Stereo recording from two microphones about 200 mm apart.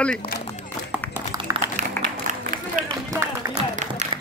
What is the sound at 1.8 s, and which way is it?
Run, 40° right (ahead or behind).